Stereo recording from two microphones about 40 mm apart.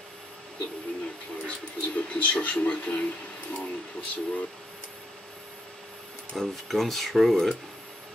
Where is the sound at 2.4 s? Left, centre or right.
Left.